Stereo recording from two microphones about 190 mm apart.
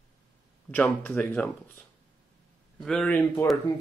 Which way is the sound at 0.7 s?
5° left (ahead or behind).